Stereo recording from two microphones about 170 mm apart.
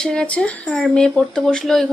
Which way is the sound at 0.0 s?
5° left (ahead or behind).